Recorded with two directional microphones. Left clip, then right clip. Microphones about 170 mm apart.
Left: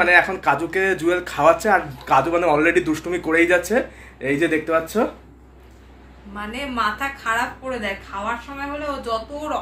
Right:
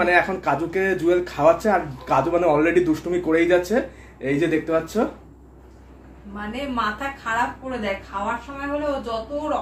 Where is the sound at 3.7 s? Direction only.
40° left (ahead or behind).